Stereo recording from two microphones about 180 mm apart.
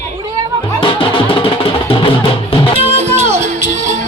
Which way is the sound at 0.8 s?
30° left (ahead or behind).